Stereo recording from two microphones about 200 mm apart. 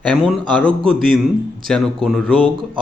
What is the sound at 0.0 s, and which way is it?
A man's voice, centre (ahead or behind).